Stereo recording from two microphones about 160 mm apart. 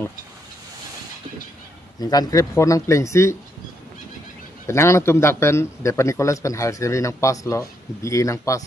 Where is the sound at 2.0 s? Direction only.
25° left (ahead or behind).